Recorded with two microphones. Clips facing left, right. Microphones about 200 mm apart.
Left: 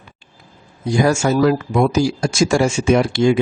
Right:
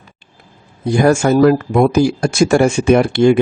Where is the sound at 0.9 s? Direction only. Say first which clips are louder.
Right 4 dB; 55° right (ahead or behind).